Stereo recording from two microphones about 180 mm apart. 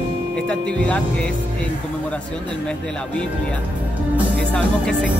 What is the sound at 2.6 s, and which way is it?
Speech, 5° left (ahead or behind).